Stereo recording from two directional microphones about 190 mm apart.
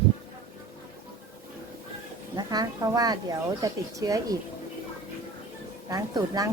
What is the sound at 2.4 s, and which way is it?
Speech, 20° right (ahead or behind).